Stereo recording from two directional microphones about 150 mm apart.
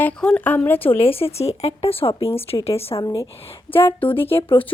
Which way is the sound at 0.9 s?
40° left (ahead or behind).